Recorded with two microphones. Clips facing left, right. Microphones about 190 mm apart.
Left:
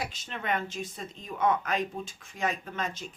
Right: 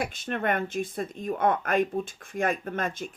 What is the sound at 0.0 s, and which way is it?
Speech, 55° right (ahead or behind).